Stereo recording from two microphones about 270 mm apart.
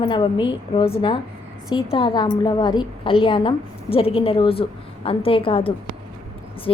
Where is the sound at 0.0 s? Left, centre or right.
Centre.